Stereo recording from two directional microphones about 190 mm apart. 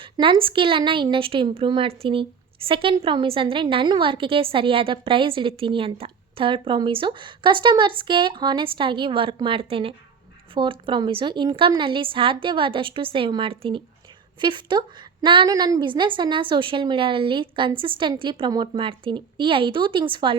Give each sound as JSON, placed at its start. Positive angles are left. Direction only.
{"t": 0.0, "sound": "a woman's voice", "side_deg": -25}